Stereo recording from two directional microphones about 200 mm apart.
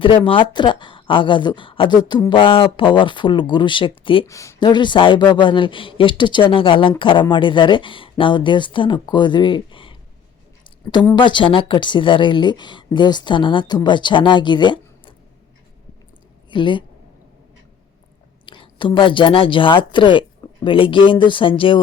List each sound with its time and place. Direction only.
0.3 s speech: 25° left (ahead or behind)
4.3 s speech: 15° left (ahead or behind)
11.0 s speech: 25° left (ahead or behind)
16.5 s a woman's voice: 25° left (ahead or behind)
18.4 s a woman's voice: 25° left (ahead or behind)